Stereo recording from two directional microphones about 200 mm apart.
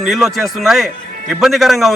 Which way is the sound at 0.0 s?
Centre (ahead or behind).